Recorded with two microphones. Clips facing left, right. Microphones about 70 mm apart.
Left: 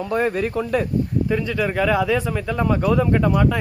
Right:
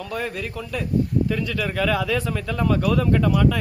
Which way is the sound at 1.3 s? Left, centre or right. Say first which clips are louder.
Left 4 dB; left.